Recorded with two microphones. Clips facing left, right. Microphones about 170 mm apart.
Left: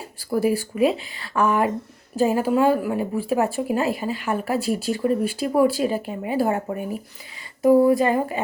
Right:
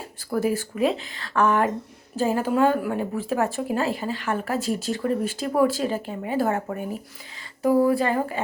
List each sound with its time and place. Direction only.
0.3 s speech: 10° left (ahead or behind)